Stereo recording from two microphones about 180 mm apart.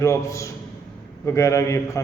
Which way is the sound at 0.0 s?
15° left (ahead or behind).